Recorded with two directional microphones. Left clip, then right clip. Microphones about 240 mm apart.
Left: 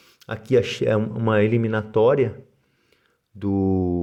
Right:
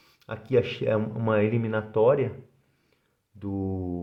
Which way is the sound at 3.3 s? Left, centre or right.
Left.